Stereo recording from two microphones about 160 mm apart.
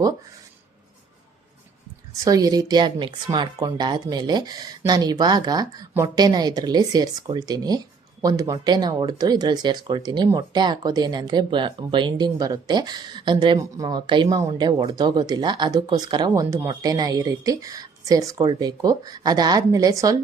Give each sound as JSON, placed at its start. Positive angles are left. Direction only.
{"t": 2.1, "sound": "speech", "side_deg": -25}